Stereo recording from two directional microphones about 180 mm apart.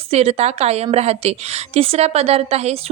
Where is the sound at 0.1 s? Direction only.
35° right (ahead or behind).